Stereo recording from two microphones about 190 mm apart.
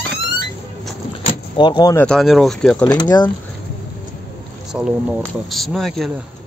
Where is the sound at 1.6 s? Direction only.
25° left (ahead or behind).